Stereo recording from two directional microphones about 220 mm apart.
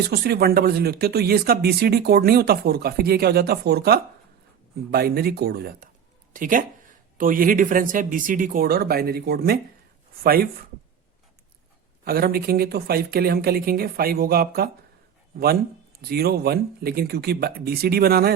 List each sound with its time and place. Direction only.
0.1 s speech: 45° right (ahead or behind)
12.0 s speech: 45° right (ahead or behind)
16.0 s speech: 45° right (ahead or behind)